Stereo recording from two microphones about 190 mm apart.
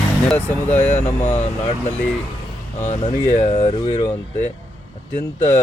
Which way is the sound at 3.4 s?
30° left (ahead or behind).